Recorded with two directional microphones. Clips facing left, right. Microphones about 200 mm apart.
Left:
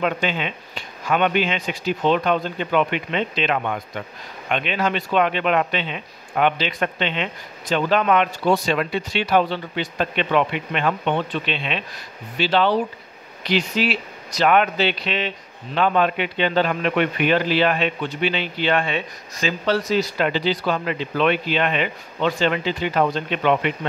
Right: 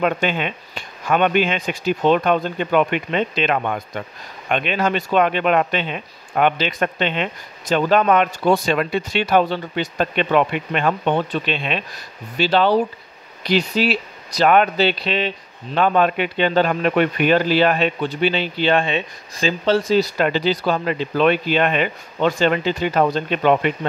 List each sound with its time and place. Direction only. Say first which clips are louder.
0.0 s speech: right 3 dB; 50° right (ahead or behind); by 20.1 s 30° right (ahead or behind)
20.2 s speech: right 2 dB; 45° right (ahead or behind)